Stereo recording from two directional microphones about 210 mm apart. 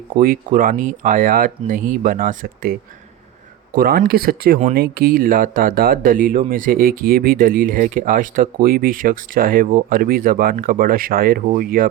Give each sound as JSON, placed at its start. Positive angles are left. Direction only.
{"t": 0.2, "sound": "speech", "side_deg": -40}